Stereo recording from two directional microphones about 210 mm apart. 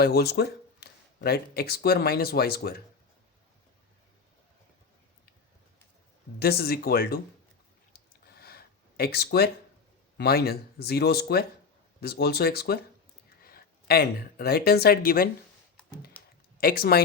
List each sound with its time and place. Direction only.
0.0 s speech: 50° left (ahead or behind)
6.4 s speech: 45° left (ahead or behind)
7.9 s a sound: 50° left (ahead or behind)
10.2 s speech: 50° left (ahead or behind)
16.1 s computer keyboard: 5° left (ahead or behind)
16.6 s speech: 45° left (ahead or behind)